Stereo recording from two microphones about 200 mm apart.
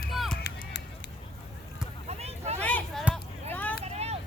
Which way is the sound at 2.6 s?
5° left (ahead or behind).